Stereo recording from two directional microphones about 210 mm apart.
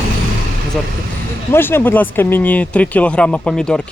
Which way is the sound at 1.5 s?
10° left (ahead or behind).